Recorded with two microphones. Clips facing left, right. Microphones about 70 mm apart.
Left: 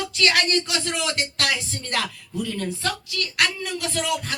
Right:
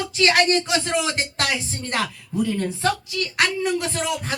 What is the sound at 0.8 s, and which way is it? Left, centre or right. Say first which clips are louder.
Music: right 3 dB; right.